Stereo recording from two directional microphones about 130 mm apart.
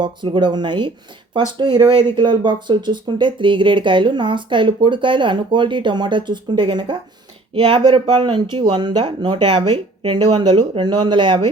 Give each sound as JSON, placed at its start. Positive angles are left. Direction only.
{"t": 0.0, "sound": "speech", "side_deg": -35}
{"t": 1.9, "sound": "speech", "side_deg": 20}
{"t": 2.1, "sound": "speech", "side_deg": -35}